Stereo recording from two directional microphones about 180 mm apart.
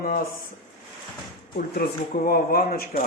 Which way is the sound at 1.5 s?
55° left (ahead or behind).